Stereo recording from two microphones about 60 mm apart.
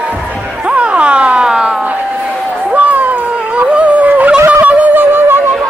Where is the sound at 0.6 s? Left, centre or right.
Centre.